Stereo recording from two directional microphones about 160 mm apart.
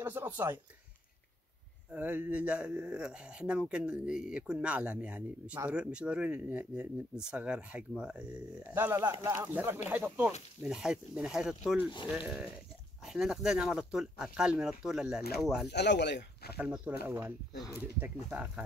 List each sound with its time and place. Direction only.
0.0 s speech: 15° right (ahead or behind)
1.9 s speech: 10° right (ahead or behind)
15.7 s speech: 90° left
16.5 s speech: 10° right (ahead or behind)